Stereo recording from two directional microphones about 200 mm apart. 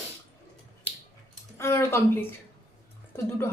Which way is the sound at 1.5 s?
15° left (ahead or behind).